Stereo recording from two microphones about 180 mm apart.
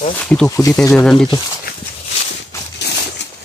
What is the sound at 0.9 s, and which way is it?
Speech, centre (ahead or behind).